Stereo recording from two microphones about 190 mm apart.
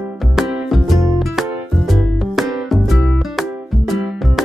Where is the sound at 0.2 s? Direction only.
Centre (ahead or behind).